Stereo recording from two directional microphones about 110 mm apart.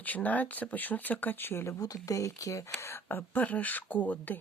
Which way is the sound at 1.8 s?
30° left (ahead or behind).